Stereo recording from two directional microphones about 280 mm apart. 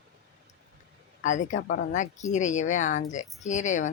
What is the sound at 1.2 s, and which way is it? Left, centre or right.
Speech, left.